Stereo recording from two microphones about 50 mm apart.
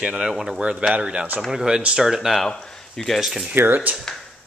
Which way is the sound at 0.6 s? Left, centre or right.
Right.